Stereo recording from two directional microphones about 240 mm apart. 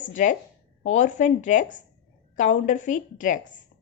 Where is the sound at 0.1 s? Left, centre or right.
Left.